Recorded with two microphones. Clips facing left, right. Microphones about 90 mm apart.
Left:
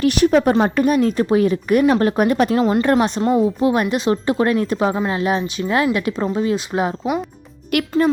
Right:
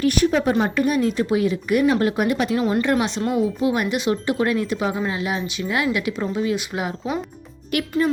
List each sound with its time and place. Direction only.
0.0 s speech: 80° left
0.6 s a woman's voice: 40° left (ahead or behind)
2.6 s speech: 25° left (ahead or behind)
7.7 s a child's voice: 65° left (ahead or behind)